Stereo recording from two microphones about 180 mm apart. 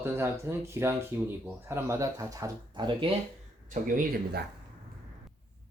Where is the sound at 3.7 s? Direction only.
50° right (ahead or behind).